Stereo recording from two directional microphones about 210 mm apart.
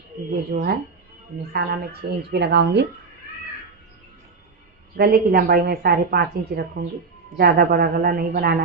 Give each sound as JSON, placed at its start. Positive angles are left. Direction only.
{"t": 0.5, "sound": "a woman's voice", "side_deg": -45}
{"t": 4.9, "sound": "a woman's voice", "side_deg": -45}